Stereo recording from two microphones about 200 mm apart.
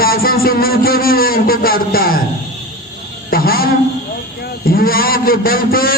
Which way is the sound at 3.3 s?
50° left (ahead or behind).